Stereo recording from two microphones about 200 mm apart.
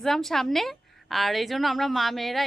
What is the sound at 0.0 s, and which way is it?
A woman's voice, centre (ahead or behind).